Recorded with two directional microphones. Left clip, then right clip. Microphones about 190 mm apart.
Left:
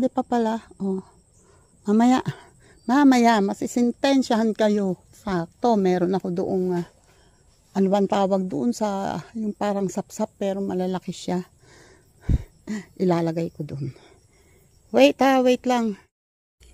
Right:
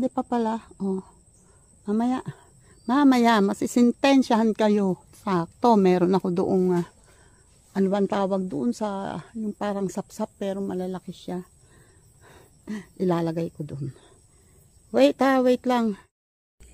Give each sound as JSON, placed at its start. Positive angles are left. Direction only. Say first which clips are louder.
{"t": 0.0, "sound": "speech", "louder": "left 3 dB", "side_deg": 10}
{"t": 1.9, "sound": "speech", "louder": "left 7 dB", "side_deg": 30}
{"t": 2.7, "sound": "speech", "louder": "left 2 dB", "side_deg": 15}
{"t": 3.4, "sound": "speech", "louder": "right 2 dB", "side_deg": -5}
{"t": 7.7, "sound": "speech", "louder": "left 3 dB", "side_deg": 10}
{"t": 10.9, "sound": "speech", "louder": "left 6 dB", "side_deg": 30}